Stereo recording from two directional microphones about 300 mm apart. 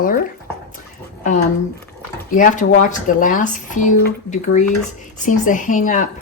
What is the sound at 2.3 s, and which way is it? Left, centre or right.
Speech, left.